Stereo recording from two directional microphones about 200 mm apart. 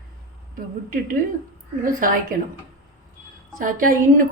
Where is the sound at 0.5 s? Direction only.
45° right (ahead or behind).